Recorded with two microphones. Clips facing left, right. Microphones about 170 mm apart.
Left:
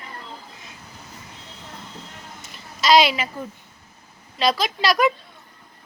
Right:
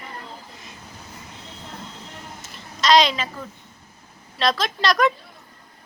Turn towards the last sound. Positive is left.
turn(degrees=0)  # may be behind; listen again after turning